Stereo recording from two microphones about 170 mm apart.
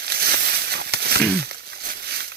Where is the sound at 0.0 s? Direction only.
70° right (ahead or behind).